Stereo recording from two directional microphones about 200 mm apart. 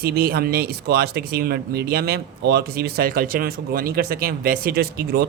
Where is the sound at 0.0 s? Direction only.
50° right (ahead or behind).